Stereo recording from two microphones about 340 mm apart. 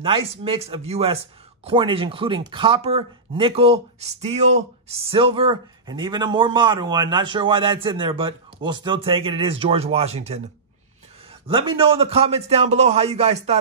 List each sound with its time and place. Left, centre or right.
0.4 s speech: centre
11.4 s speech: centre